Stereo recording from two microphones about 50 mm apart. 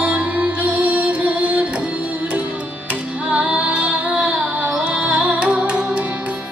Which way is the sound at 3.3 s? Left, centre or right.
Right.